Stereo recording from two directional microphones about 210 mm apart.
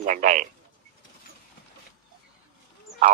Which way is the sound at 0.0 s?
35° right (ahead or behind).